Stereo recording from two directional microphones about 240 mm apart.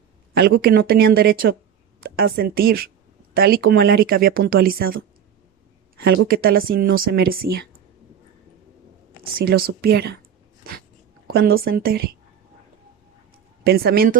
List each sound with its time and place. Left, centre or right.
0.3 s speech: right
6.0 s speech: right
9.2 s speech: right
11.3 s a woman's voice: right
13.7 s speech: right